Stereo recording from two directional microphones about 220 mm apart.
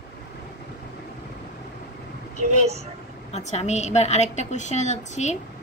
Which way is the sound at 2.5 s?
30° right (ahead or behind).